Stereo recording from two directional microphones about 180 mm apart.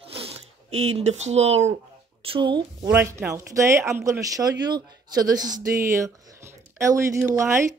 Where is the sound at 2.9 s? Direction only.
15° right (ahead or behind).